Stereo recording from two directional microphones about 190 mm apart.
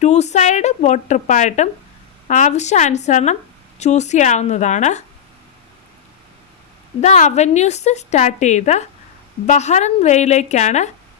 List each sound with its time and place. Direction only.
0.0 s a woman's voice: 35° left (ahead or behind)
7.0 s a woman's voice: 35° left (ahead or behind)